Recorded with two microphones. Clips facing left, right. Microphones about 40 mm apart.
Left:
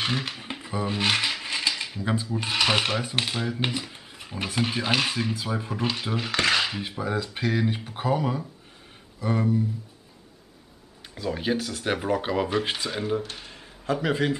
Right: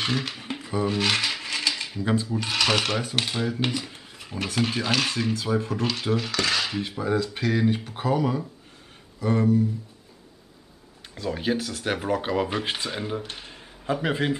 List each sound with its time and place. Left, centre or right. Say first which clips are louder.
0.0 s coin: right 1 dB; centre
2.3 s speech: left 3 dB; centre
6.3 s cutlery: left 7 dB; left
6.6 s speech: right 1 dB; centre
11.1 s speech: even; centre
13.3 s a sound: right 1 dB; centre